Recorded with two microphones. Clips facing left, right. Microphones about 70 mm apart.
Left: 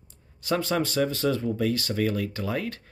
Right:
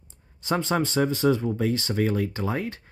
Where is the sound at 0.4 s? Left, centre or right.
Right.